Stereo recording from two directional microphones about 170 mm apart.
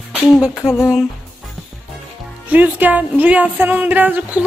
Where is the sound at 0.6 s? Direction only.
15° left (ahead or behind).